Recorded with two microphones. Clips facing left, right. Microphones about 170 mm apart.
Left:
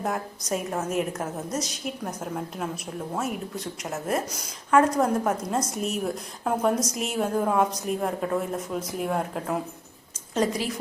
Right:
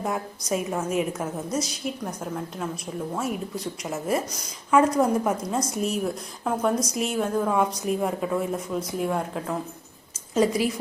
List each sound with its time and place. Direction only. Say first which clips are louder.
0.0 s a woman's voice: right 1 dB; centre (ahead or behind)